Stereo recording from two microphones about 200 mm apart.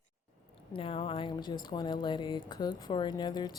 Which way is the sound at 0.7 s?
25° left (ahead or behind).